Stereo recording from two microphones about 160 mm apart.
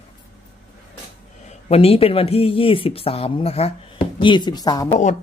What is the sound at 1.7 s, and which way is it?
Speech, 40° left (ahead or behind).